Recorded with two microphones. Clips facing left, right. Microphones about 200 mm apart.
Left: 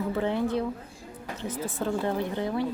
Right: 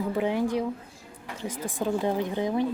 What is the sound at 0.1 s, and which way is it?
Speech, 15° right (ahead or behind).